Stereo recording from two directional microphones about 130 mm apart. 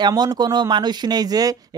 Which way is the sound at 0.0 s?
30° right (ahead or behind).